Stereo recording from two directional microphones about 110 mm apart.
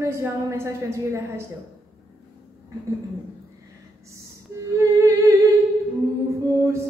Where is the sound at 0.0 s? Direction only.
25° right (ahead or behind).